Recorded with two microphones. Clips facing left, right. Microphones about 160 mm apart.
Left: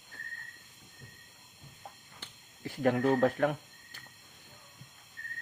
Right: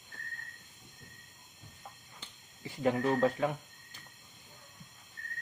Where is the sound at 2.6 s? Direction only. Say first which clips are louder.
Left 2 dB; 65° left (ahead or behind).